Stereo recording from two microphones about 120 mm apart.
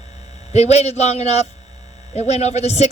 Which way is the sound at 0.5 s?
65° left (ahead or behind).